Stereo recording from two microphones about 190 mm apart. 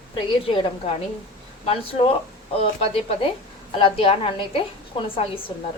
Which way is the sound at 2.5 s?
30° left (ahead or behind).